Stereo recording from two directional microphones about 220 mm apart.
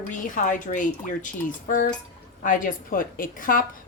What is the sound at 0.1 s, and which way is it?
Speech, 35° left (ahead or behind).